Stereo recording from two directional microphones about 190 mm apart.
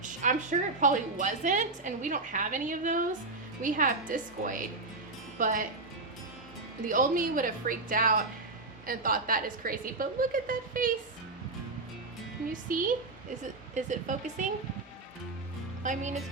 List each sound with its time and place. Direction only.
0.0 s a sound: 40° right (ahead or behind)
0.8 s a woman's voice: 40° right (ahead or behind)
6.8 s a woman's voice: 45° right (ahead or behind)
12.6 s a woman's voice: 45° right (ahead or behind)
15.8 s speech: 40° right (ahead or behind)